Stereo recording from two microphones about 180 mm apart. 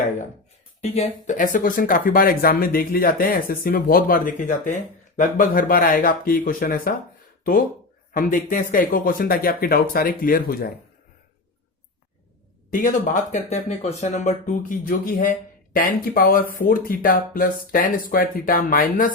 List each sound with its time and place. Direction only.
0.8 s speech: 35° left (ahead or behind); by 6.9 s 50° left (ahead or behind)
8.1 s speech: 50° left (ahead or behind)
12.7 s speech: 45° left (ahead or behind)